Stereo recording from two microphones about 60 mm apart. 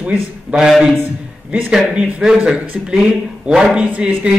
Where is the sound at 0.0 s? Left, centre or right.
Centre.